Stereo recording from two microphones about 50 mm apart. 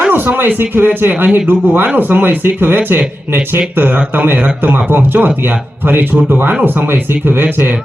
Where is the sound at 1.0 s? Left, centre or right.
Right.